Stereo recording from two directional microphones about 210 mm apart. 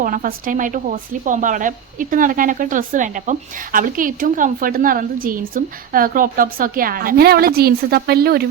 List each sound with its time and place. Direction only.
0.0 s speech: 40° right (ahead or behind)